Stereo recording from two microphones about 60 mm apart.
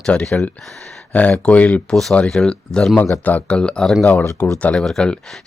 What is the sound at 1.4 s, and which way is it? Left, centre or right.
Speech, left.